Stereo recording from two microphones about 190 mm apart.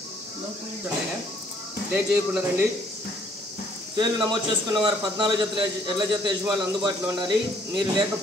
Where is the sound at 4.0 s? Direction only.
25° right (ahead or behind).